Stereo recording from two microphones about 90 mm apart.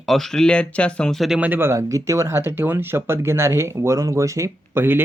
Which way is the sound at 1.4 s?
25° right (ahead or behind).